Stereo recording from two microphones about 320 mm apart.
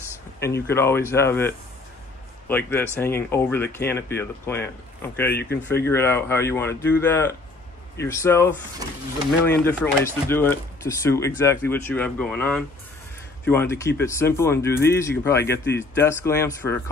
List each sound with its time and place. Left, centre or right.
0.4 s a man's voice: centre
5.4 s speech: left
5.9 s speech: centre